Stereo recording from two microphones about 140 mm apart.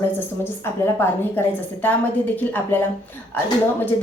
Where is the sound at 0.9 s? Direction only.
15° left (ahead or behind).